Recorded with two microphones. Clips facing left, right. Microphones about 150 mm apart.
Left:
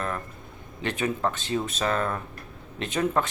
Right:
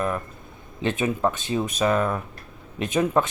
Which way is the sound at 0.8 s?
20° right (ahead or behind).